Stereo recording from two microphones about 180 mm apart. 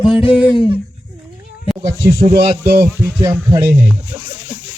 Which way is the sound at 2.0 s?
15° right (ahead or behind).